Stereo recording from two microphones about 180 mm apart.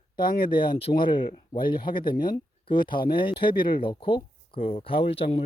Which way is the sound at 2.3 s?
25° left (ahead or behind).